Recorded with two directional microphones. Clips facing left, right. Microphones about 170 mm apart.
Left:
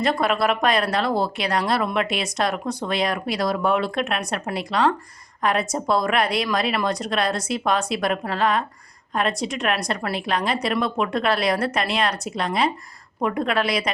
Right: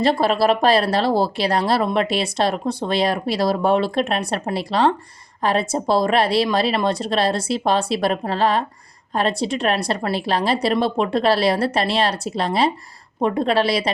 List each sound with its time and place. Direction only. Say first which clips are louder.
0.0 s speech: right 4 dB; 30° right (ahead or behind)